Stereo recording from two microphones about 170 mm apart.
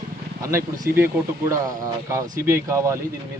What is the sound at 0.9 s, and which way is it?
Speech, 15° right (ahead or behind).